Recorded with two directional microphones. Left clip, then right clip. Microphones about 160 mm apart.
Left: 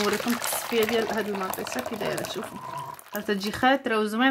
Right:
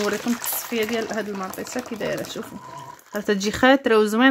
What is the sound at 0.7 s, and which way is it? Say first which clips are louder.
Speech: even; 50° right (ahead or behind).